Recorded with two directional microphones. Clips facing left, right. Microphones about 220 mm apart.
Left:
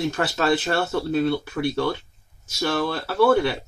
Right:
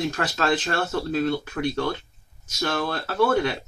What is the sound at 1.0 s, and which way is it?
Speech, 10° left (ahead or behind).